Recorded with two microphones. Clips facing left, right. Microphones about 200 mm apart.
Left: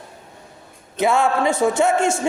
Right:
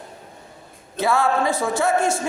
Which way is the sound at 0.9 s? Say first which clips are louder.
Left 2 dB; 20° left (ahead or behind).